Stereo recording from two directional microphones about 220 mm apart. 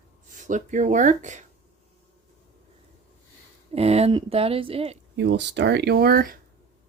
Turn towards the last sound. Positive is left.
turn(degrees=-40)  # may be behind; listen again after turning